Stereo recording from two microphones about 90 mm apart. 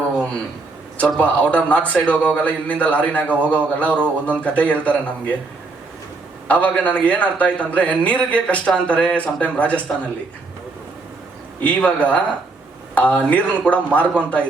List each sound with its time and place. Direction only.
0.9 s a man's voice: 10° left (ahead or behind)
6.5 s a man's voice: 15° left (ahead or behind)
11.6 s a man's voice: 15° left (ahead or behind)